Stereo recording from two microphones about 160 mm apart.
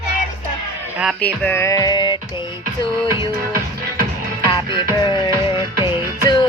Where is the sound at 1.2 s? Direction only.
10° left (ahead or behind); by 2.5 s 30° left (ahead or behind).